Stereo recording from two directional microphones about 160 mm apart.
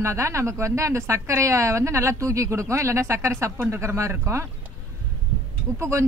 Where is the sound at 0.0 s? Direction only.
20° right (ahead or behind).